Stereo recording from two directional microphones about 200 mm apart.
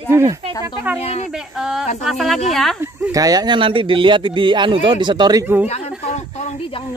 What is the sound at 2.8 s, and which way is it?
Speech, 15° right (ahead or behind).